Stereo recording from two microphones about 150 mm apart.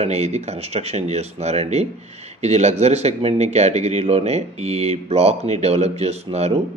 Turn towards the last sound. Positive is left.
turn(degrees=-45)  # may be behind; listen again after turning